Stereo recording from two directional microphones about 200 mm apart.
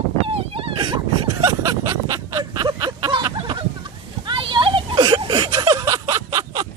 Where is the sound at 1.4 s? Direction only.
15° right (ahead or behind).